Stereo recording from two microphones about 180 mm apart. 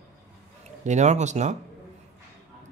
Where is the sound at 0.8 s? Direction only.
40° right (ahead or behind).